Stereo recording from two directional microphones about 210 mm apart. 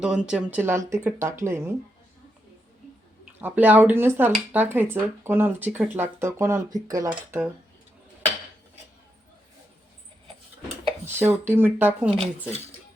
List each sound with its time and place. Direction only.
0.0 s speech: 5° right (ahead or behind)
3.3 s speech: 10° right (ahead or behind)
11.2 s speech: 10° right (ahead or behind)